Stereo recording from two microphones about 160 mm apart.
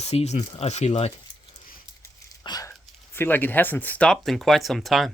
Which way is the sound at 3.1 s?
15° left (ahead or behind).